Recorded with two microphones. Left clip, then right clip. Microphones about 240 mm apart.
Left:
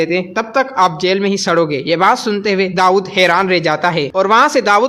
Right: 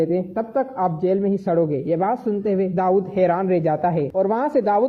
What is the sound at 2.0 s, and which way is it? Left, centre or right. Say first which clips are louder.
Speech: left 9 dB; centre.